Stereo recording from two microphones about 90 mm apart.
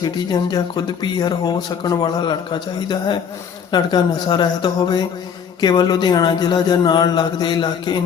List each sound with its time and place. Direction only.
0.0 s speech: 50° left (ahead or behind)